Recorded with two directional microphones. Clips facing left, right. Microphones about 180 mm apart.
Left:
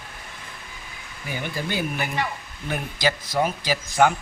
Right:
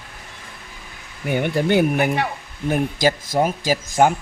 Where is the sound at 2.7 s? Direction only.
45° right (ahead or behind).